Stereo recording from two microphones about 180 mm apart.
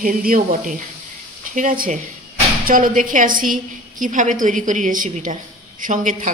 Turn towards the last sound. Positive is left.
turn(degrees=-45)  # may be behind; listen again after turning